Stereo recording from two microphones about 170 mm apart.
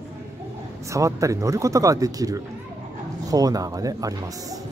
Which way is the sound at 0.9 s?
20° right (ahead or behind).